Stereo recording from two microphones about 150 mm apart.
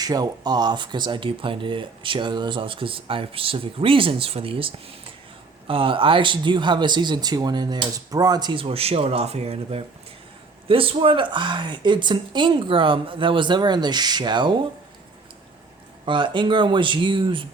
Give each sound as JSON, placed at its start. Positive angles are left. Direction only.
{"t": 0.0, "sound": "speech", "side_deg": -25}
{"t": 16.0, "sound": "speech", "side_deg": -35}